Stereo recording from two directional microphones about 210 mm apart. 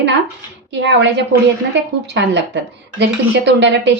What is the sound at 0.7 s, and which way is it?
Speech, 55° right (ahead or behind).